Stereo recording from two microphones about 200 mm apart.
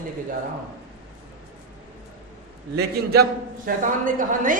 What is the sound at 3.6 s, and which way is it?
Speech, 40° right (ahead or behind).